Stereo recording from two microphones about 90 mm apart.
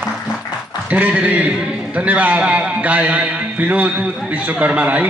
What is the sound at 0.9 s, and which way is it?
A man's voice, 15° right (ahead or behind).